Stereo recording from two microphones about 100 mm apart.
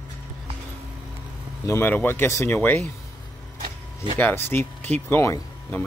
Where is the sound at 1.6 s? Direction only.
25° left (ahead or behind).